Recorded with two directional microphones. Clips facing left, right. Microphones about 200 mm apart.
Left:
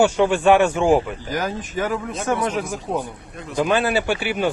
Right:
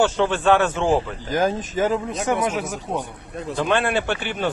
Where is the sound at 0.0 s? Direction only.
15° left (ahead or behind).